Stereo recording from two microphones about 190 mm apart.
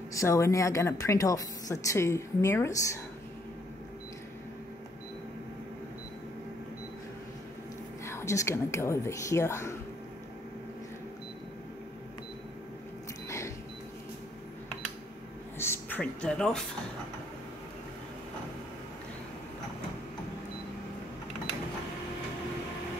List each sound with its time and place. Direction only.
0.1 s speech: 15° left (ahead or behind)
8.0 s speech: 15° left (ahead or behind)
15.6 s speech: 10° left (ahead or behind)